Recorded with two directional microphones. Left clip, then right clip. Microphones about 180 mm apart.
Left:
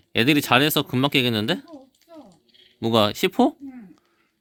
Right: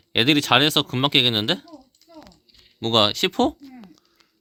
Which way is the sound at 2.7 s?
15° left (ahead or behind).